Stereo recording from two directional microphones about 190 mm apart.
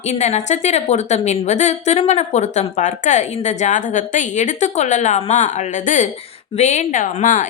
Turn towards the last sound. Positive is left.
turn(degrees=40)  # may be behind; listen again after turning